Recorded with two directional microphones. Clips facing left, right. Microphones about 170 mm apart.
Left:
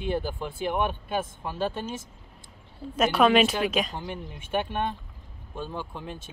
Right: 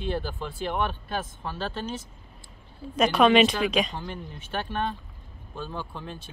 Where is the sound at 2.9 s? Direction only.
5° left (ahead or behind).